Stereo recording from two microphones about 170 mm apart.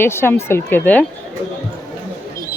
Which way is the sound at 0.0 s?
15° left (ahead or behind).